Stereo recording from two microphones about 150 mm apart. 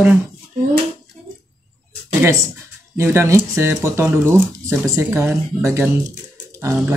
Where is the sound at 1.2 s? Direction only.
5° left (ahead or behind).